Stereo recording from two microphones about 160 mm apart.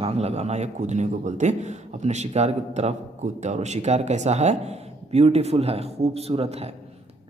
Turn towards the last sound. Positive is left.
turn(degrees=-40)  # may be behind; listen again after turning